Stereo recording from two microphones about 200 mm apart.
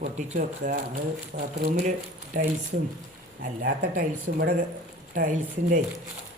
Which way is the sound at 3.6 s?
50° right (ahead or behind).